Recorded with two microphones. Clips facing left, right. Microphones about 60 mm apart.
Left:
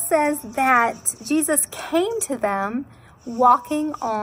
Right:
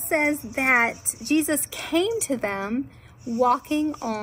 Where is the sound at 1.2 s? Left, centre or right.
Right.